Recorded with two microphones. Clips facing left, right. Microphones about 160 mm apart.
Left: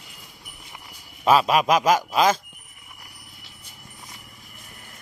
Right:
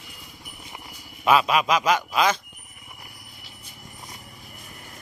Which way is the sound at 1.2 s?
35° left (ahead or behind).